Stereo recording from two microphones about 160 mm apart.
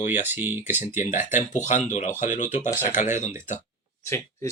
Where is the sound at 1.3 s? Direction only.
50° left (ahead or behind).